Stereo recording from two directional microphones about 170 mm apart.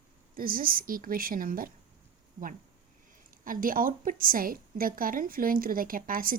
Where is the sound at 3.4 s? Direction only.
55° right (ahead or behind).